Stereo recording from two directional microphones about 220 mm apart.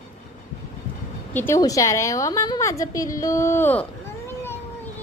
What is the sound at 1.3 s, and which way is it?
A woman's voice, 10° left (ahead or behind).